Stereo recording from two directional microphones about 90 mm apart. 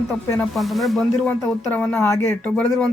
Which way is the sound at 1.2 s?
20° left (ahead or behind).